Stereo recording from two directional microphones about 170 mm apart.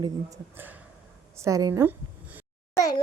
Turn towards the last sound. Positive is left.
turn(degrees=20)  # may be behind; listen again after turning